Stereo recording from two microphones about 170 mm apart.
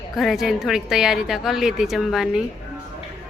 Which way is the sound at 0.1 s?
Centre (ahead or behind).